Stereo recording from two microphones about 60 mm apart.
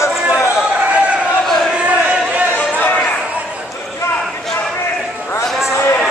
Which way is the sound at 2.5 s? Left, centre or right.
Left.